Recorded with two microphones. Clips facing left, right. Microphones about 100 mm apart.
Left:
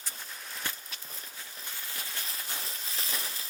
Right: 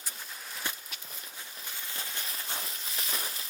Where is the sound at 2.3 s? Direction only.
30° right (ahead or behind).